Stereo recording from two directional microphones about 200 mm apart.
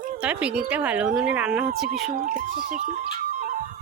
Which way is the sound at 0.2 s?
5° right (ahead or behind).